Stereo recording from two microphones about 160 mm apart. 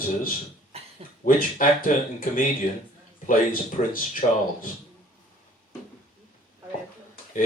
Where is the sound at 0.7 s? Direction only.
40° right (ahead or behind).